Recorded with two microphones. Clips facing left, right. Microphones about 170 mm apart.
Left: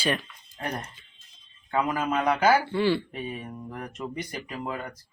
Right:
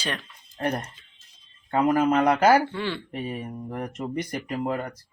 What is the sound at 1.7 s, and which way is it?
Speech, 50° right (ahead or behind).